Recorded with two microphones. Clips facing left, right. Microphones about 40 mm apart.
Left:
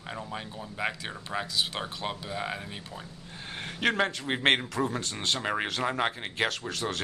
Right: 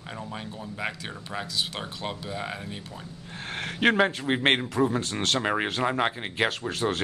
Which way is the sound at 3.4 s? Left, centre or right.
Right.